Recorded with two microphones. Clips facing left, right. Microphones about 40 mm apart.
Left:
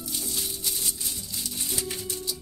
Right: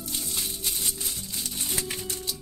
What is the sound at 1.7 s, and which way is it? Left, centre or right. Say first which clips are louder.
Music: even; right.